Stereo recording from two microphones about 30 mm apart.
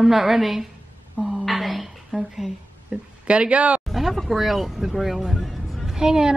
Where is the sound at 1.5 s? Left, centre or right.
Centre.